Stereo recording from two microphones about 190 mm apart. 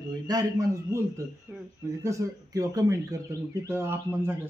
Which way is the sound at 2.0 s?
15° right (ahead or behind).